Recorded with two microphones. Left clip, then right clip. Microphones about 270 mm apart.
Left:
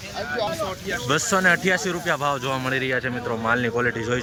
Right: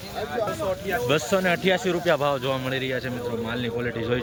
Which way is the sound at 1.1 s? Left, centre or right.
Centre.